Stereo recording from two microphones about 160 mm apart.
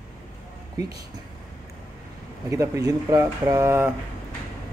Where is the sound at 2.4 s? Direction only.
20° right (ahead or behind).